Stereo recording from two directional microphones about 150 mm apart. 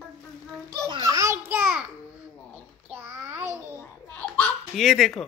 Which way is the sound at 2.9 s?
15° right (ahead or behind).